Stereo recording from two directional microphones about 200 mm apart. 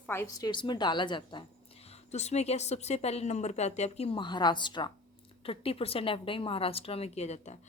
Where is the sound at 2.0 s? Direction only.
35° left (ahead or behind).